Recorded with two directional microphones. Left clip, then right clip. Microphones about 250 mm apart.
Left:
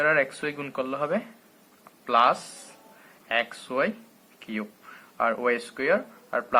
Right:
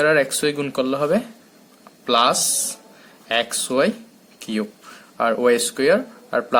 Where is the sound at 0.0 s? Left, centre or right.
Right.